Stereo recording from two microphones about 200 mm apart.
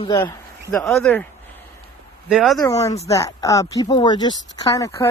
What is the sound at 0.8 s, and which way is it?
Speech, 5° left (ahead or behind).